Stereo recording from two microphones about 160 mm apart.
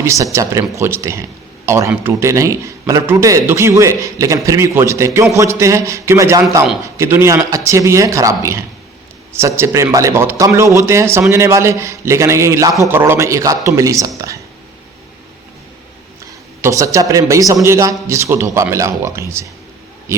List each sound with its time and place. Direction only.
0.0 s a man's voice: 20° right (ahead or behind)
16.6 s a man's voice: 20° right (ahead or behind)